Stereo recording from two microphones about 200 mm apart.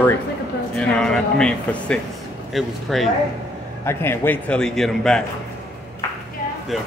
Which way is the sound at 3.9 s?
10° left (ahead or behind).